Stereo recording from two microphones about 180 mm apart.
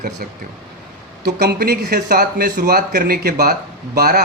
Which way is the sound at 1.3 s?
60° right (ahead or behind).